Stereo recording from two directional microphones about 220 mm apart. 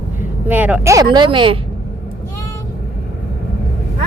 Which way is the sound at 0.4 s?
10° right (ahead or behind).